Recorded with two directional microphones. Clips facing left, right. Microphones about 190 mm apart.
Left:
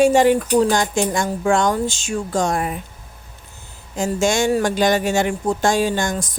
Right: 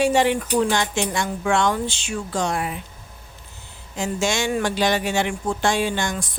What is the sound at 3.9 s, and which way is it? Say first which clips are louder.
Speech: left 5 dB; 45° left (ahead or behind).